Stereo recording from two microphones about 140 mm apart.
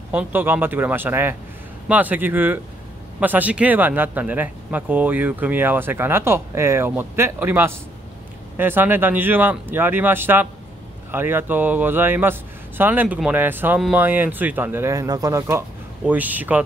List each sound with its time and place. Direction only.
0.1 s speech: 15° right (ahead or behind)